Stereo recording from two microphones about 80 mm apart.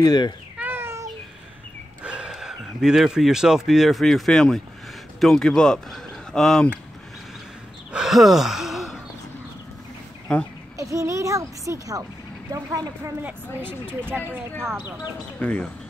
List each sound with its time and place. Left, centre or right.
0.0 s speech: left
0.6 s a sound: right
2.0 s speech: centre
7.9 s gasp: centre
10.8 s a child's voice: right
13.2 s a woman's voice: right
15.3 s speech: centre